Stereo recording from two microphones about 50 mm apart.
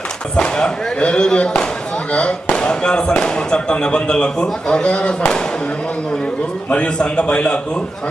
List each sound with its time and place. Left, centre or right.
0.3 s speech: centre
6.7 s a man's voice: left